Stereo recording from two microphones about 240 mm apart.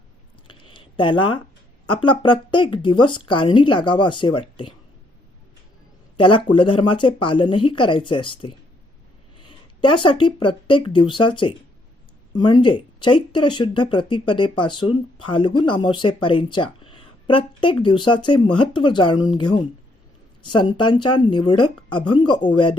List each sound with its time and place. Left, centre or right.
0.4 s a sound: centre
1.9 s speech: left
6.1 s speech: left